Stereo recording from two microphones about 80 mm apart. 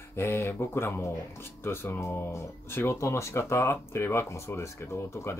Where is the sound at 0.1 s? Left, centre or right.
Left.